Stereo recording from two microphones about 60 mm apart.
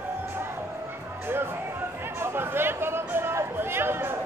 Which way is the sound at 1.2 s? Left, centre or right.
Right.